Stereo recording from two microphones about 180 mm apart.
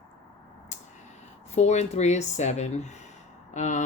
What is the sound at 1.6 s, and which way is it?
Speech, 40° left (ahead or behind).